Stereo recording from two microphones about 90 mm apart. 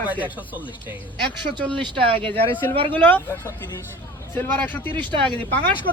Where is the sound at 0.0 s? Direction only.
20° right (ahead or behind).